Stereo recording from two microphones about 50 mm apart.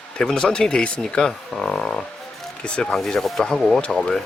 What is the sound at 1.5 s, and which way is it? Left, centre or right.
Frog, centre.